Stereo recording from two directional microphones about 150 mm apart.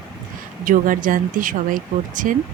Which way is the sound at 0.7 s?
65° right (ahead or behind).